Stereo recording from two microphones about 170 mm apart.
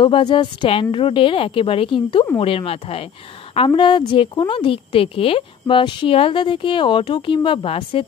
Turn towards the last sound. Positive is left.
turn(degrees=35)  # may be behind; listen again after turning